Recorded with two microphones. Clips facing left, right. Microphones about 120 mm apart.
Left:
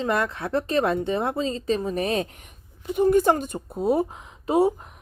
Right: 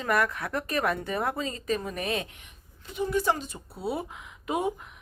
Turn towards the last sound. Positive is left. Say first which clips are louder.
# left 8 dB
turn(degrees=35)  # may be behind; listen again after turning